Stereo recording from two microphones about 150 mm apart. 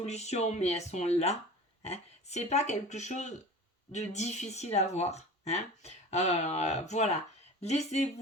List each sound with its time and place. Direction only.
0.0 s speech: 45° left (ahead or behind)